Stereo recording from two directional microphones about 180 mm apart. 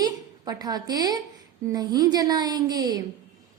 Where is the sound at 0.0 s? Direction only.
20° right (ahead or behind).